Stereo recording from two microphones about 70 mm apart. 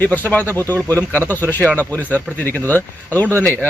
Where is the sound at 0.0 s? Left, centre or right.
Left.